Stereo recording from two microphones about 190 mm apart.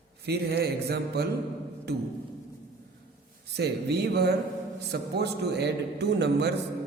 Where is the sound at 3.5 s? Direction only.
60° right (ahead or behind).